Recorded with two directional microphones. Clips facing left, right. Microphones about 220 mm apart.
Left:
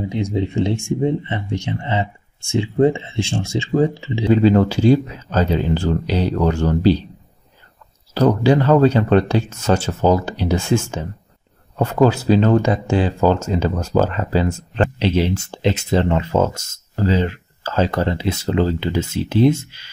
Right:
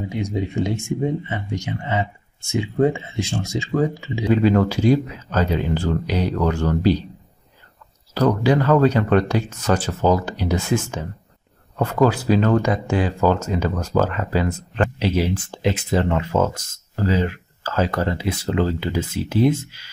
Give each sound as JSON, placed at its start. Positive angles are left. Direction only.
{"t": 0.2, "sound": "speech", "side_deg": 30}
{"t": 8.1, "sound": "speech", "side_deg": 30}